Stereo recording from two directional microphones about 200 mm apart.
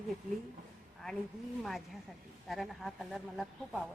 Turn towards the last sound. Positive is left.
turn(degrees=0)  # may be behind; listen again after turning